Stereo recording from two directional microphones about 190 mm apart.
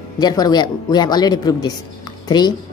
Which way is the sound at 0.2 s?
20° left (ahead or behind).